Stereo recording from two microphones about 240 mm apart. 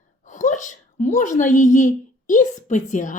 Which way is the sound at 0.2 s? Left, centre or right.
Left.